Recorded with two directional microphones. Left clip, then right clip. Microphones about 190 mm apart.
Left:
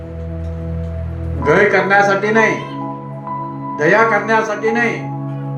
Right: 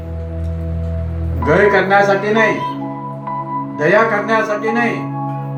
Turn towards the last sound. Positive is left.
turn(degrees=55)  # may be behind; listen again after turning